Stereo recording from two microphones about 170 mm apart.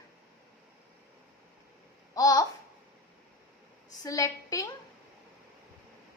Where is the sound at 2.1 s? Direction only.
20° left (ahead or behind).